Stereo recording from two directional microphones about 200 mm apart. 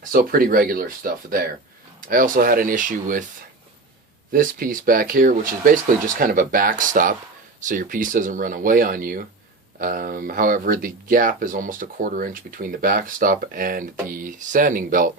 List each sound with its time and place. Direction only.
0.1 s speech: 45° right (ahead or behind)
4.3 s speech: 45° right (ahead or behind)